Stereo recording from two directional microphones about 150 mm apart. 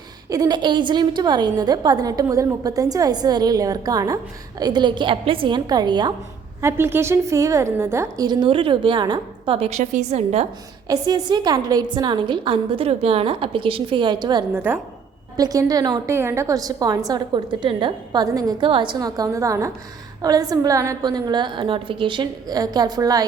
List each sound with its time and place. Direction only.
0.3 s a woman's voice: 25° right (ahead or behind)
6.6 s a woman's voice: 15° right (ahead or behind); by 10.4 s 45° right (ahead or behind)
10.8 s a woman's voice: 25° right (ahead or behind)
14.5 s a woman's voice: 15° right (ahead or behind)
15.4 s a woman's voice: 25° right (ahead or behind)